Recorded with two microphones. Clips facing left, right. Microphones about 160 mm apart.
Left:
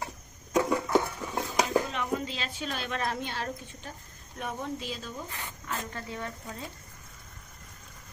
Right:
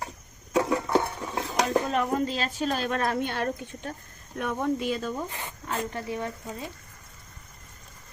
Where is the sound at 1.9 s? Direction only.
45° right (ahead or behind).